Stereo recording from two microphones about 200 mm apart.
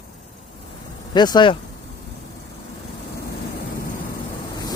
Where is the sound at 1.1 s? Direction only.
20° left (ahead or behind).